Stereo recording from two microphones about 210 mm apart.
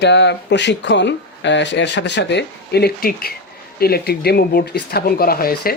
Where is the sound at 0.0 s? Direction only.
55° left (ahead or behind).